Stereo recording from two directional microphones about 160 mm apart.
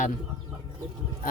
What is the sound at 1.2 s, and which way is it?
Speech, 60° left (ahead or behind).